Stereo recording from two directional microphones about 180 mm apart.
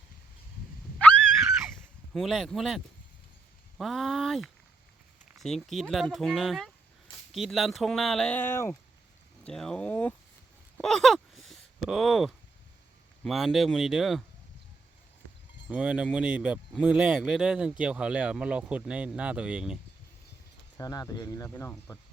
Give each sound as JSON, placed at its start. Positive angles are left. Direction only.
{"t": 2.1, "sound": "speech", "side_deg": 0}
{"t": 10.8, "sound": "a sound", "side_deg": 0}
{"t": 13.2, "sound": "speech", "side_deg": 0}
{"t": 15.7, "sound": "speech", "side_deg": -5}
{"t": 20.7, "sound": "speech", "side_deg": 20}